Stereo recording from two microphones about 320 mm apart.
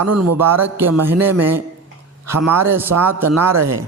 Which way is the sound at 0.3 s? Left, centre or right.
Centre.